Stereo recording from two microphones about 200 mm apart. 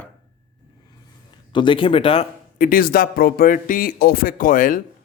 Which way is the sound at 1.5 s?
25° left (ahead or behind).